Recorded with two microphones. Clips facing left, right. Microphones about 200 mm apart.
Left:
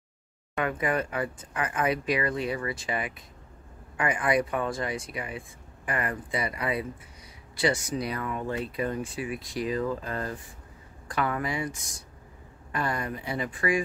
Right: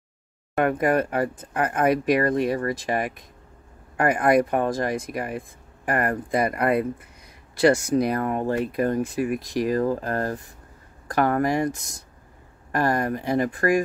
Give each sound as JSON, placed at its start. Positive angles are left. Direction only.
{"t": 0.7, "sound": "speech", "side_deg": -55}
{"t": 3.9, "sound": "speech", "side_deg": -60}
{"t": 11.1, "sound": "speech", "side_deg": -45}
{"t": 12.9, "sound": "speech", "side_deg": -50}